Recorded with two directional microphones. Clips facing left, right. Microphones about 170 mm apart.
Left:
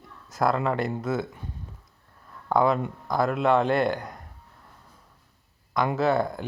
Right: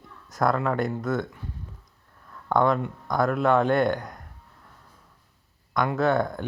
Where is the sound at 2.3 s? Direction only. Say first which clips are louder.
Even; 5° left (ahead or behind).